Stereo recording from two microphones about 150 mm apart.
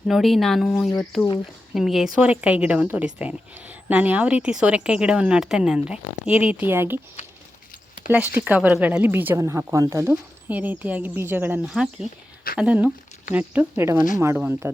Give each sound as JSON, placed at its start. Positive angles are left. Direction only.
{"t": 0.1, "sound": "a woman's voice", "side_deg": 0}
{"t": 8.0, "sound": "a woman's voice", "side_deg": -10}